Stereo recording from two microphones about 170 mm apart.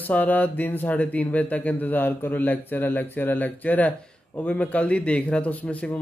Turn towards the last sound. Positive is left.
turn(degrees=5)  # may be behind; listen again after turning